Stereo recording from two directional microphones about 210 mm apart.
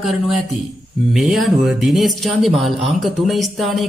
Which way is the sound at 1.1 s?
Centre (ahead or behind).